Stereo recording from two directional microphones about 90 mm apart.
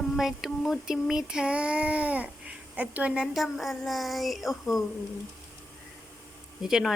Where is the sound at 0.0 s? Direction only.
5° right (ahead or behind).